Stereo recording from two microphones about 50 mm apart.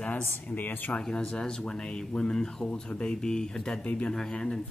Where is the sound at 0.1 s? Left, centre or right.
Left.